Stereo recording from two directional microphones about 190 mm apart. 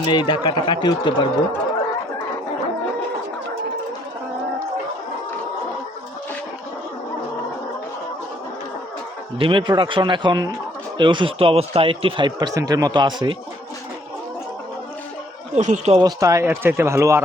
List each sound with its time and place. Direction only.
0.0 s speech: 25° left (ahead or behind)
9.4 s speech: 25° right (ahead or behind)
15.5 s speech: 40° right (ahead or behind)
16.0 s a man's voice: 20° right (ahead or behind)